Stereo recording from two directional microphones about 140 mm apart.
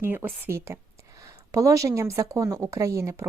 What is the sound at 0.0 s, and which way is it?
A woman's voice, 15° right (ahead or behind).